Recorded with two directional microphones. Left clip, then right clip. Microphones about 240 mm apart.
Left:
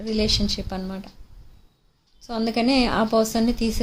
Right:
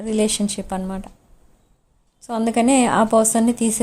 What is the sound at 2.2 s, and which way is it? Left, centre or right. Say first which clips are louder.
A woman's voice: right 4 dB; right.